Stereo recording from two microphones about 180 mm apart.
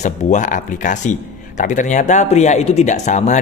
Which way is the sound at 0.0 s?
40° left (ahead or behind).